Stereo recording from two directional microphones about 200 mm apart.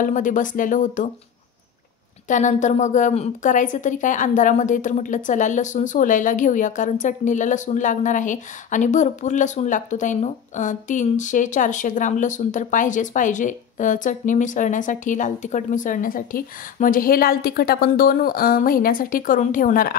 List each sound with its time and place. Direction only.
0.0 s a woman's voice: 40° left (ahead or behind)
2.2 s a woman's voice: 40° left (ahead or behind)